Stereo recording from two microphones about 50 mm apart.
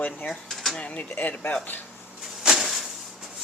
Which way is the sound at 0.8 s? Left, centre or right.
Left.